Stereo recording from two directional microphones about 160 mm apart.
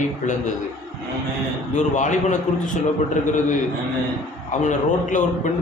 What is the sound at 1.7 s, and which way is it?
Speech, 50° left (ahead or behind).